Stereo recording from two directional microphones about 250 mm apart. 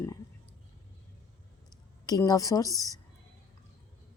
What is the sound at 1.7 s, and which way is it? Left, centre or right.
Speech, centre.